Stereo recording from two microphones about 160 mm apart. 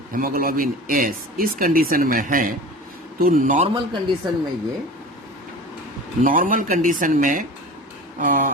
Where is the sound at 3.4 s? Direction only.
45° right (ahead or behind).